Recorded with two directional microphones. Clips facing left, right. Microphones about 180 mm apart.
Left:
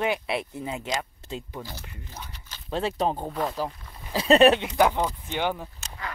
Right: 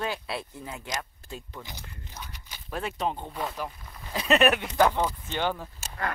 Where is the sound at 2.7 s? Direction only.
30° left (ahead or behind).